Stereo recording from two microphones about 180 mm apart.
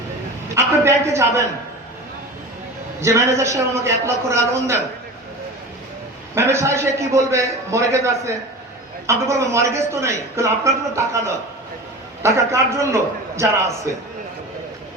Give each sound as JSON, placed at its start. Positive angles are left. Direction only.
{"t": 0.5, "sound": "a sound", "side_deg": -15}
{"t": 3.0, "sound": "a man's voice", "side_deg": -15}
{"t": 6.3, "sound": "a man's voice", "side_deg": -15}
{"t": 12.2, "sound": "a man's voice", "side_deg": -15}